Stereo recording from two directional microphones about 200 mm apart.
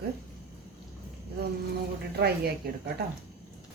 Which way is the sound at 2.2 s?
50° right (ahead or behind).